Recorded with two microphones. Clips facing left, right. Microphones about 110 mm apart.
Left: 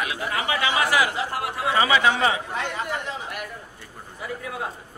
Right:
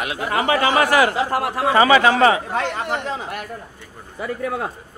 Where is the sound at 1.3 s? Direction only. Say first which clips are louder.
Right 6 dB; 70° right (ahead or behind).